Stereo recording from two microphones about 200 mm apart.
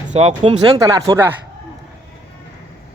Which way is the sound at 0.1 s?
30° right (ahead or behind).